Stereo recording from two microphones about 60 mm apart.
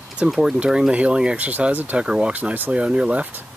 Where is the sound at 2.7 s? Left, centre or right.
Centre.